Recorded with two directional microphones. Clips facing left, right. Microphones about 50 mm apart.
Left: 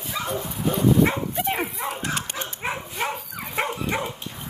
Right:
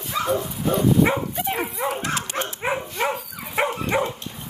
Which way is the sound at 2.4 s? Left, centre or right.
Right.